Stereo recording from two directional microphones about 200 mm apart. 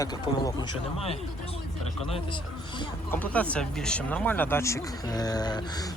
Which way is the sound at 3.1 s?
5° left (ahead or behind).